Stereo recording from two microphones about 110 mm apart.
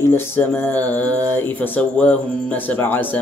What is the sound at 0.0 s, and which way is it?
Speech, 15° left (ahead or behind).